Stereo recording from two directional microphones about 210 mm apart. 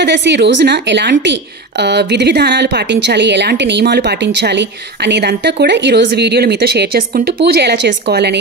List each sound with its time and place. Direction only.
0.0 s a woman's voice: 55° right (ahead or behind)